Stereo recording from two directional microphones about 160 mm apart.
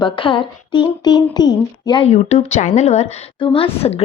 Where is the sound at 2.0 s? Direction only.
45° left (ahead or behind).